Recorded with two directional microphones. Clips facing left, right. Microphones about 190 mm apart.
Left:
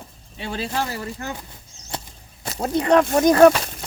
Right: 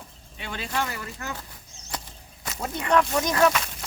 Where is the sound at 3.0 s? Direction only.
50° left (ahead or behind).